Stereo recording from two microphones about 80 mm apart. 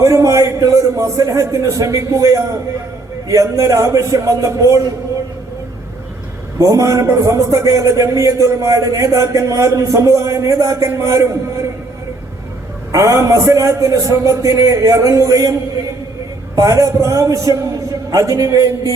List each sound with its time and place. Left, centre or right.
0.0 s speech: right
6.6 s a man's voice: right
12.9 s speech: right
16.6 s speech: right